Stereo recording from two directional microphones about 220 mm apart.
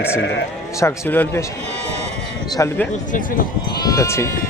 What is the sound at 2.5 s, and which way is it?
Speech, 15° left (ahead or behind).